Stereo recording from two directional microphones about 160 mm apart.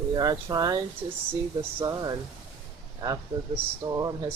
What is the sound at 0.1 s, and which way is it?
Speech, 25° right (ahead or behind).